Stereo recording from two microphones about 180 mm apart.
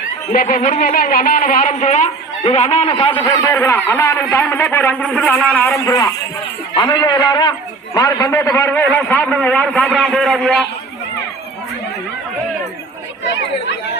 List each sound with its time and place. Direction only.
0.3 s a woman's voice: 45° left (ahead or behind); by 3.2 s 30° left (ahead or behind)
3.2 s a man's voice: 15° left (ahead or behind); by 10.7 s centre (ahead or behind)